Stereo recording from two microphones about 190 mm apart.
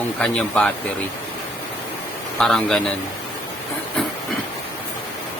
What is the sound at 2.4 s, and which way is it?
Speech, 5° left (ahead or behind).